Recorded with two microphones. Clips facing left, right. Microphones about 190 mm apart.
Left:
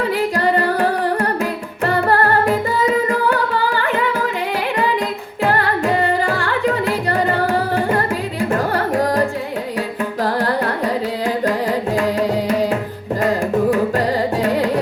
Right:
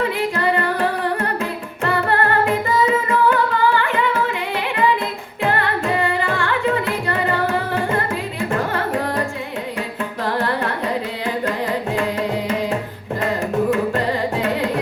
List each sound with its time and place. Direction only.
0.3 s music: 35° left (ahead or behind)
1.8 s music: 40° left (ahead or behind)
5.4 s music: 40° left (ahead or behind)
10.2 s carnatic music: 35° left (ahead or behind)